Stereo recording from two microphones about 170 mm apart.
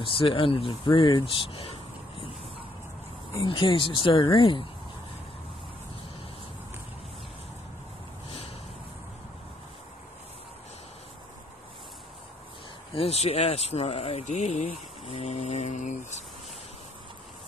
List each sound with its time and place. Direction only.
0.0 s speech: 30° left (ahead or behind)
3.3 s speech: 30° left (ahead or behind)
8.3 s a sound: 35° left (ahead or behind)
12.9 s speech: 35° left (ahead or behind)